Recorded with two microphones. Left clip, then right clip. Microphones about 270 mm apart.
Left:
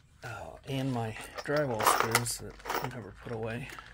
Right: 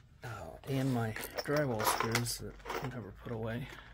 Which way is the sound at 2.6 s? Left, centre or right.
Left.